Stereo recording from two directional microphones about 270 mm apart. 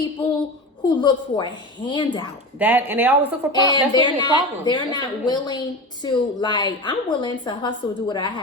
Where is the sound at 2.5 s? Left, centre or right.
Centre.